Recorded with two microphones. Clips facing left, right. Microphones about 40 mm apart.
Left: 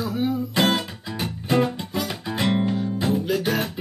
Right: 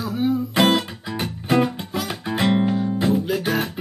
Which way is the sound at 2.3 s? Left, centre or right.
Centre.